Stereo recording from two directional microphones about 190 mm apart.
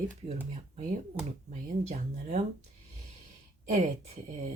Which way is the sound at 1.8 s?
35° right (ahead or behind).